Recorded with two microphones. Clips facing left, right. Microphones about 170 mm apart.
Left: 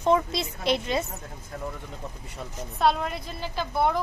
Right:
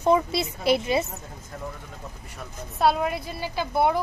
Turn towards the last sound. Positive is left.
turn(degrees=-10)  # may be behind; listen again after turning